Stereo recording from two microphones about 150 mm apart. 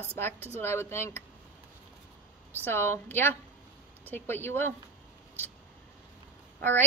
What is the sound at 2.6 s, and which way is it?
A woman's voice, 15° left (ahead or behind).